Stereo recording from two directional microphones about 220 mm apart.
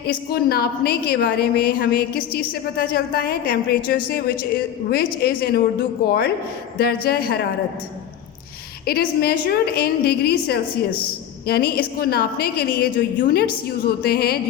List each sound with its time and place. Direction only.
0.0 s a woman's voice: 45° left (ahead or behind)
8.8 s a woman's voice: 45° left (ahead or behind)